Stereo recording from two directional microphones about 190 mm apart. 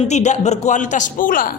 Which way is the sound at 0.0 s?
35° left (ahead or behind).